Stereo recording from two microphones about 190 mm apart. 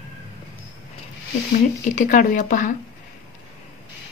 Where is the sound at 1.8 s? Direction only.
45° left (ahead or behind).